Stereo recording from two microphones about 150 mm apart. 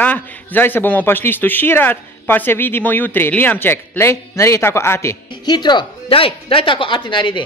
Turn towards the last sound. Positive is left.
turn(degrees=35)  # may be behind; listen again after turning